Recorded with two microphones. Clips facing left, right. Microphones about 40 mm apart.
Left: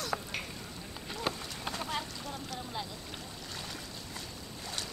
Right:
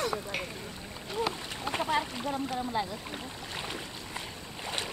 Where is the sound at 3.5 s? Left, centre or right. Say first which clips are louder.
Right 5 dB; right.